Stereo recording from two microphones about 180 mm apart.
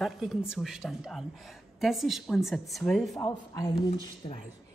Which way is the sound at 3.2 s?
20° left (ahead or behind).